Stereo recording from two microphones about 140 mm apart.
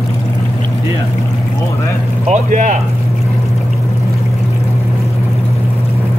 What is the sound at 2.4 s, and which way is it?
Speech, 65° right (ahead or behind).